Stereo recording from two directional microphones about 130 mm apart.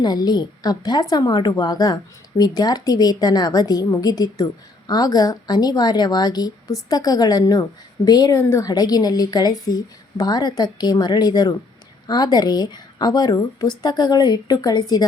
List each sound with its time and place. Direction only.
0.0 s a woman's voice: 30° left (ahead or behind)